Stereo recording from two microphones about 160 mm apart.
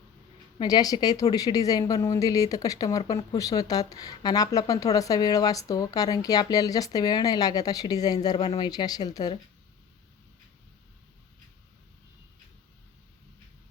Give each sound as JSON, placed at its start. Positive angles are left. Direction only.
{"t": 0.6, "sound": "a woman's voice", "side_deg": 25}